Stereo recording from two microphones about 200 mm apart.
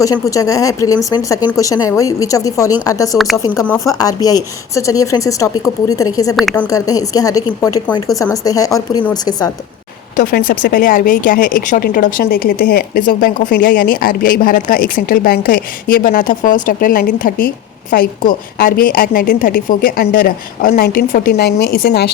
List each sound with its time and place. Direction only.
0.0 s a woman's voice: 15° left (ahead or behind)
3.2 s speech: centre (ahead or behind)
3.4 s a woman's voice: 15° left (ahead or behind)
6.3 s a woman's voice: 5° left (ahead or behind)
10.2 s a woman's voice: 45° left (ahead or behind)